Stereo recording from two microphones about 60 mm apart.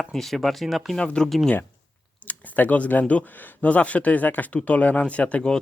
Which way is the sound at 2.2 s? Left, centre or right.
Left.